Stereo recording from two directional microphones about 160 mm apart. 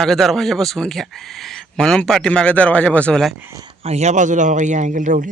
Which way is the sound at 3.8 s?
40° right (ahead or behind).